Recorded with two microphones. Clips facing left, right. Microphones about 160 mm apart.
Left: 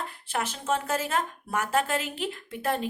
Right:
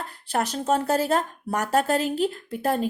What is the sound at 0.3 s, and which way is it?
A woman's voice, 40° right (ahead or behind).